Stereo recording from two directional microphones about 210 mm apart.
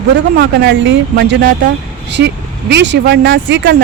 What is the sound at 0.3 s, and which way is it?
Speech, 55° right (ahead or behind).